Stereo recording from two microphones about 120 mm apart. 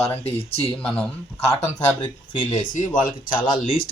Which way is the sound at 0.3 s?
55° left (ahead or behind).